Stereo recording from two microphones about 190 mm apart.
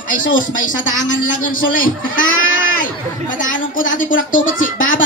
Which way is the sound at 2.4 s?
90° left.